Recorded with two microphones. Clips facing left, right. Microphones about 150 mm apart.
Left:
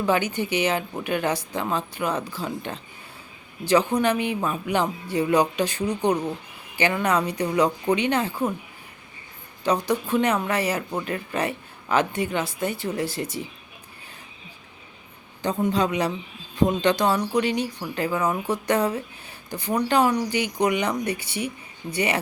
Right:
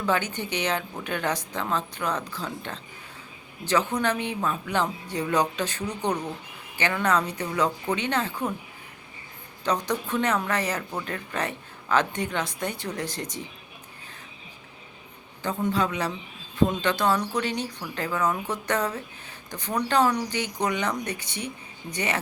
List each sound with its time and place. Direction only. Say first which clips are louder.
0.0 s speech: left 4 dB; 10° left (ahead or behind)
9.6 s speech: left 4 dB; 10° left (ahead or behind)
15.4 s speech: left 3 dB; 15° left (ahead or behind)